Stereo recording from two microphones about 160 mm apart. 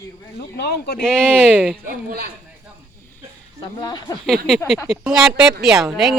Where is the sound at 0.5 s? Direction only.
75° left (ahead or behind).